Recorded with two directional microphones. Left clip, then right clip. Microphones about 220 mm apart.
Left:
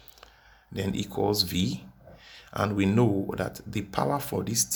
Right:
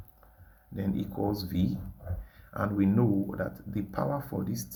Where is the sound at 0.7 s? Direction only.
30° left (ahead or behind).